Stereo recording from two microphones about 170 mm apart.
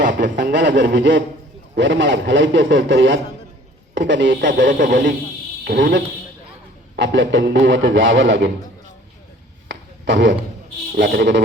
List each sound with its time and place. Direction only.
0.0 s a man's voice: 85° right
9.6 s a sound: 90° right
10.9 s speech: 70° right (ahead or behind)